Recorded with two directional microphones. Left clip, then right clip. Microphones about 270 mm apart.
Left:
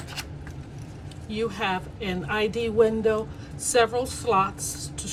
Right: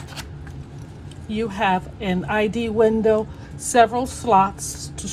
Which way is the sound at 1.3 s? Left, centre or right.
Centre.